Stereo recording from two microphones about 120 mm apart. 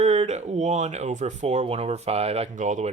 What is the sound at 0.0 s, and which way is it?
Speech, 70° right (ahead or behind).